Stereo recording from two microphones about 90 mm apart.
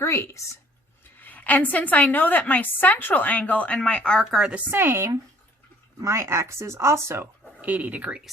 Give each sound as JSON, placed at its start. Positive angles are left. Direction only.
{"t": 0.0, "sound": "speech", "side_deg": 30}
{"t": 1.2, "sound": "a woman's voice", "side_deg": 20}
{"t": 4.2, "sound": "a woman's voice", "side_deg": -5}
{"t": 4.5, "sound": "speech", "side_deg": -25}
{"t": 7.6, "sound": "speech", "side_deg": -20}